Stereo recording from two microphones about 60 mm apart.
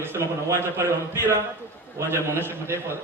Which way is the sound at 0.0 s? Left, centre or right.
Right.